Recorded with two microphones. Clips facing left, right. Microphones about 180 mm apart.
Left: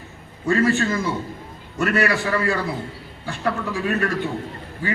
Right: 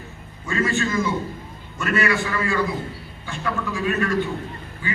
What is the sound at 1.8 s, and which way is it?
A man's voice, 60° left (ahead or behind).